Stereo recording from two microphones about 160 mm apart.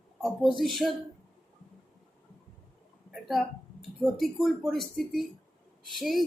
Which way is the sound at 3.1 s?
Centre (ahead or behind).